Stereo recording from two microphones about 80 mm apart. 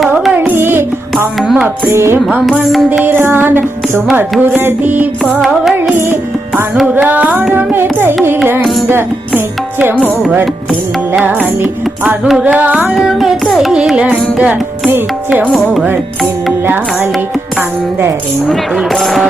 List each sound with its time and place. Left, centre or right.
0.3 s carnatic music: right
1.4 s music: centre
1.9 s music: right
6.8 s music: centre
11.6 s carnatic music: centre
14.8 s music: right
18.4 s speech: centre